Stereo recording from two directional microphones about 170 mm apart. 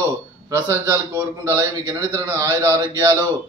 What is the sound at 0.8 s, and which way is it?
A man's voice, 20° right (ahead or behind).